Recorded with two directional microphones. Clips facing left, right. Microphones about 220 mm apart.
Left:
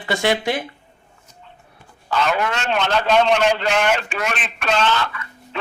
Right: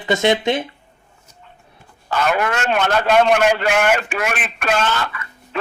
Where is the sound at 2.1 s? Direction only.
50° right (ahead or behind).